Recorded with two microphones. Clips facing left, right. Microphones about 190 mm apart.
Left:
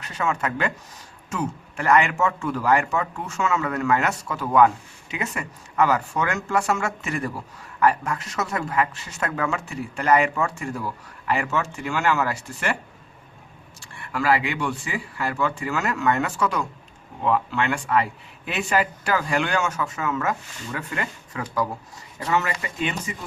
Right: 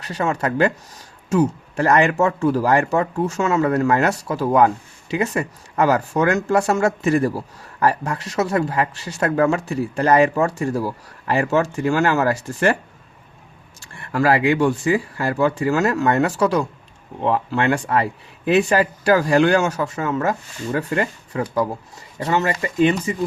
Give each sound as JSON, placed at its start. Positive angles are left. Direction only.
{"t": 0.0, "sound": "speech", "side_deg": -35}
{"t": 14.1, "sound": "speech", "side_deg": -40}